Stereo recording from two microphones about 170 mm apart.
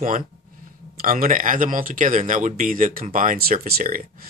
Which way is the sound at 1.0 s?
55° right (ahead or behind).